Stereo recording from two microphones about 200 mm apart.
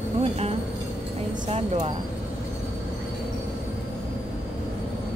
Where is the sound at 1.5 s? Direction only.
30° right (ahead or behind).